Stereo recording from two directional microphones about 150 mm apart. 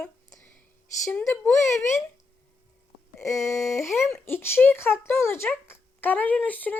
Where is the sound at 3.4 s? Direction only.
20° left (ahead or behind).